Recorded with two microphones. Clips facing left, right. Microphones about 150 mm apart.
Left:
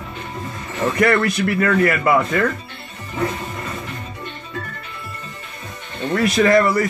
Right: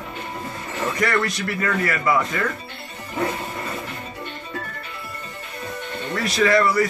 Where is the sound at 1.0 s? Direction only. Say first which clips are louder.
Left 7 dB; 60° left (ahead or behind).